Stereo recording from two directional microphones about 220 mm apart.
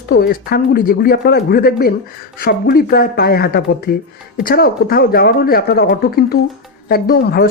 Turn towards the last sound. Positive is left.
turn(degrees=45)  # may be behind; listen again after turning